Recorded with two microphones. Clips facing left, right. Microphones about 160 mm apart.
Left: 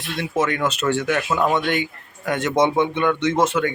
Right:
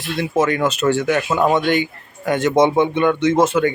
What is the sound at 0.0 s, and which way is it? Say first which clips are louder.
Speech: right 4 dB; centre (ahead or behind).